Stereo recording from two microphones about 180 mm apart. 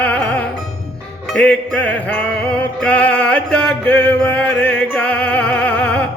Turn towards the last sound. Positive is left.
turn(degrees=5)  # may be behind; listen again after turning